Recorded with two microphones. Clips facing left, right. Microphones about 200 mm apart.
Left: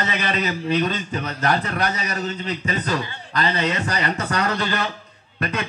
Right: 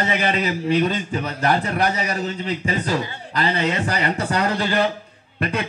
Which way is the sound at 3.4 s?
30° right (ahead or behind).